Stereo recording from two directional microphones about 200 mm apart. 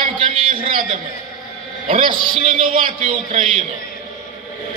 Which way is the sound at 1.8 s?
25° right (ahead or behind).